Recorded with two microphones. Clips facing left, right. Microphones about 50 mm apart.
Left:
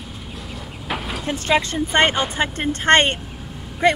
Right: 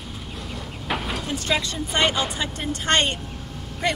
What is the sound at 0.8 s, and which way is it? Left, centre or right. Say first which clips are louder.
Vehicle: even; centre.